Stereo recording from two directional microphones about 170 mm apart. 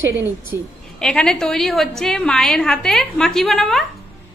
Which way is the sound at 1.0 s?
5° left (ahead or behind).